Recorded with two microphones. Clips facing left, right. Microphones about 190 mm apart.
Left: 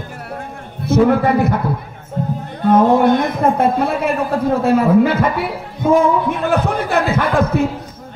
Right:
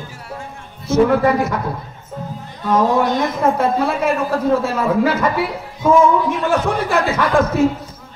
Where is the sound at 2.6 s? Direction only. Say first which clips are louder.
Left 4 dB; 55° left (ahead or behind).